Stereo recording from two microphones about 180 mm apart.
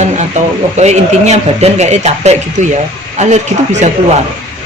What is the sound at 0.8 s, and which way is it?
Speech, 40° right (ahead or behind).